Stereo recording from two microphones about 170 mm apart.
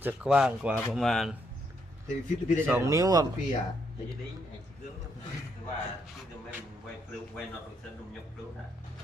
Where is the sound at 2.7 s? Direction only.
15° right (ahead or behind).